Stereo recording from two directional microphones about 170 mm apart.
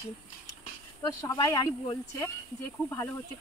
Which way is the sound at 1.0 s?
20° left (ahead or behind).